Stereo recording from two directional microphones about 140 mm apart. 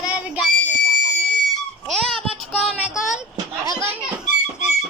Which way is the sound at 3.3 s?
20° right (ahead or behind).